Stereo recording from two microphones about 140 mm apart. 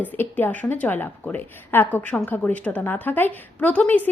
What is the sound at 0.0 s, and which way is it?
A woman's voice, 15° left (ahead or behind).